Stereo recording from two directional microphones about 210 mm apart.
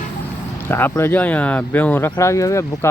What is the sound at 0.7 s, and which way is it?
Speech, 10° left (ahead or behind).